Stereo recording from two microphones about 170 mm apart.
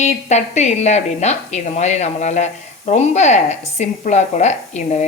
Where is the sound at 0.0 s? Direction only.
40° left (ahead or behind).